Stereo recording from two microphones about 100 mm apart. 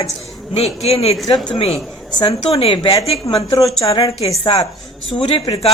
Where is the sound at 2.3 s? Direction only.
75° left (ahead or behind).